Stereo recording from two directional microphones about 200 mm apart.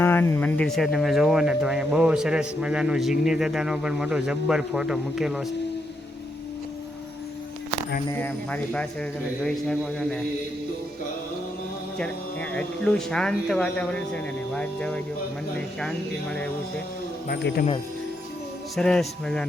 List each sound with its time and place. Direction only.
0.0 s speech: 10° left (ahead or behind)
8.0 s speech: 10° left (ahead or behind)
11.9 s speech: 5° left (ahead or behind)
17.2 s a man's voice: 50° left (ahead or behind)
18.8 s speech: 5° left (ahead or behind)